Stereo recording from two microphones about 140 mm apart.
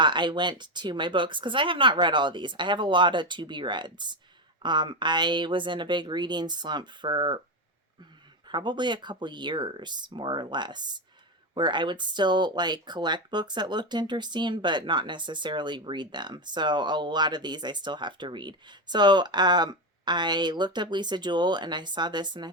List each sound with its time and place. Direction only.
0.0 s speech: 35° right (ahead or behind)
8.4 s speech: 35° right (ahead or behind)